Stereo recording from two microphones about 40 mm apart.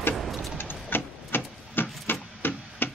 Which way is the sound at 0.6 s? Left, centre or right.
Left.